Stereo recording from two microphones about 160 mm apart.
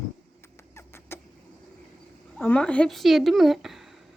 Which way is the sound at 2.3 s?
10° left (ahead or behind).